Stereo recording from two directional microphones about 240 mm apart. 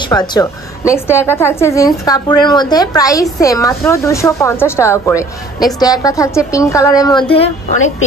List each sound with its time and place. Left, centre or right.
0.0 s a woman's voice: centre